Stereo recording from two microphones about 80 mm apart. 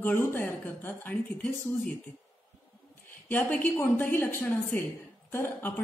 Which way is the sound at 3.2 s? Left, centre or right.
Left.